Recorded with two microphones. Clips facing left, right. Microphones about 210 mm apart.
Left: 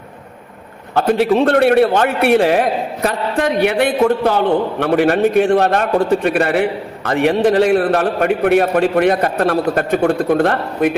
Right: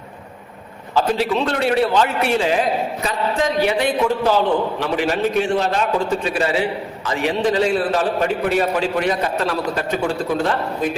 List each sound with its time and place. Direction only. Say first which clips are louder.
0.9 s a man's voice: left 5 dB; 55° left (ahead or behind)